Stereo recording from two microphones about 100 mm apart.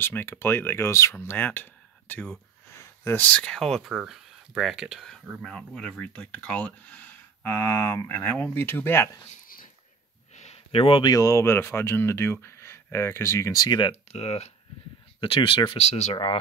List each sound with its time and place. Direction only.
0.0 s speech: 20° left (ahead or behind)
2.7 s speech: 25° left (ahead or behind); by 3.9 s 5° left (ahead or behind)
3.9 s speech: 10° right (ahead or behind); by 9.1 s 20° left (ahead or behind)
10.4 s a sound: 80° left; by 11.1 s 65° left (ahead or behind)
11.1 s speech: 35° left (ahead or behind); by 13.9 s 50° left (ahead or behind)
14.1 s speech: 90° left
15.1 s speech: 60° left (ahead or behind); by 16.3 s 80° left